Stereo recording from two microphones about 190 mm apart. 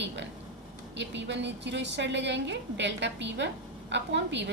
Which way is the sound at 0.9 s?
70° right (ahead or behind).